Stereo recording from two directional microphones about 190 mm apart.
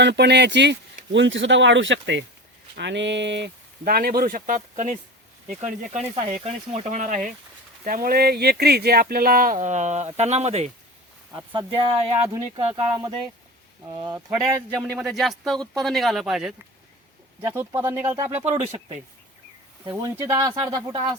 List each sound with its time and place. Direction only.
0.0 s speech: 65° right (ahead or behind); by 10.7 s 35° right (ahead or behind)
11.5 s speech: 20° right (ahead or behind)
14.8 s speech: centre (ahead or behind)
17.4 s speech: 15° right (ahead or behind)
19.8 s speech: 15° right (ahead or behind)